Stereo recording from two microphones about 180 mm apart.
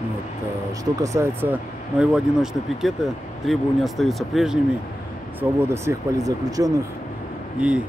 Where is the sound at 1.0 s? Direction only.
15° right (ahead or behind).